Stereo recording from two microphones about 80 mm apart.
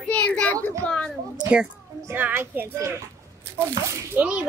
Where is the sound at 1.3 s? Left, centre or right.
Centre.